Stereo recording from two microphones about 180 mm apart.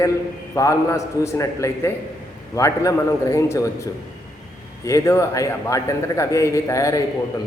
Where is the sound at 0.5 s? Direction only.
15° left (ahead or behind).